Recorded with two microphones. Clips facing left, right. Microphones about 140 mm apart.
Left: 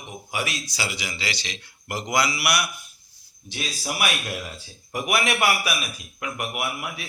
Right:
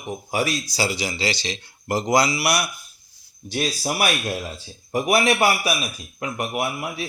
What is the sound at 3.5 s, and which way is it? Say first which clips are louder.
Speech: right 6 dB; 40° right (ahead or behind).